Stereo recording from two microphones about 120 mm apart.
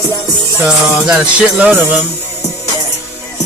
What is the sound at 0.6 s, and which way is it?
Music, 10° right (ahead or behind).